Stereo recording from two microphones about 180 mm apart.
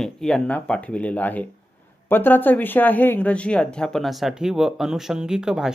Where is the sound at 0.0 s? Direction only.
5° left (ahead or behind).